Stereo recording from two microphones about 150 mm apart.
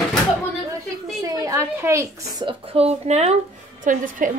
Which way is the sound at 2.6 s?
40° right (ahead or behind).